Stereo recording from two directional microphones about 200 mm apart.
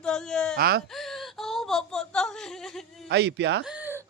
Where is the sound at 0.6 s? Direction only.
50° right (ahead or behind).